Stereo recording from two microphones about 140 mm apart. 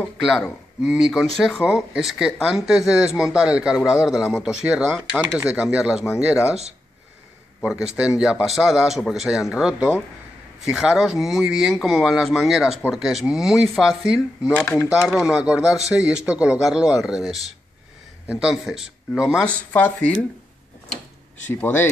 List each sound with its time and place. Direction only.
0.2 s speech: 5° right (ahead or behind)
7.6 s speech: 5° right (ahead or behind)
14.5 s speech: 10° left (ahead or behind)
14.9 s speech: 5° right (ahead or behind)
19.4 s speech: 10° left (ahead or behind)
21.5 s speech: 15° left (ahead or behind)